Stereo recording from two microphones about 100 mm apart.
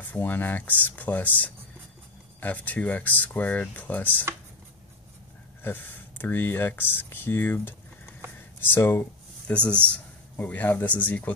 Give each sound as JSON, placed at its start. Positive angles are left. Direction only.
{"t": 0.1, "sound": "speech", "side_deg": 20}
{"t": 5.6, "sound": "speech", "side_deg": 20}
{"t": 9.5, "sound": "speech", "side_deg": 10}